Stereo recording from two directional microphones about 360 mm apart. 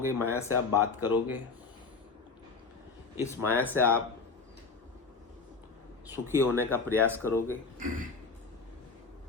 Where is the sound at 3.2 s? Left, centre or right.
Centre.